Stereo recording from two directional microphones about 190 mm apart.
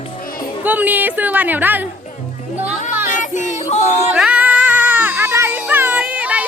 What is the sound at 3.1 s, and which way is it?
Music, 40° left (ahead or behind).